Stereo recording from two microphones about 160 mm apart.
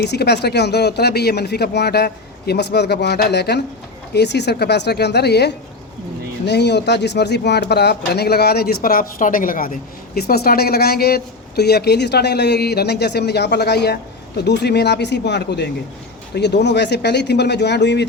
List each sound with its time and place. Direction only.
0.0 s speech: 90° left; by 9.7 s 60° left (ahead or behind)
10.2 s speech: 75° left (ahead or behind)